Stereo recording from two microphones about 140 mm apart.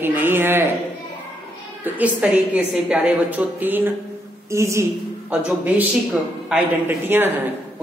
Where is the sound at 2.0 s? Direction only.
10° right (ahead or behind).